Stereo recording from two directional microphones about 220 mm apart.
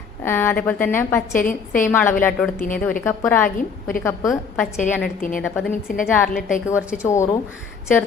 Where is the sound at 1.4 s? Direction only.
40° left (ahead or behind).